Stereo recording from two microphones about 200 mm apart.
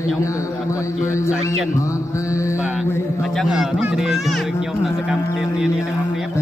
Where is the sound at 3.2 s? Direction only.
Centre (ahead or behind).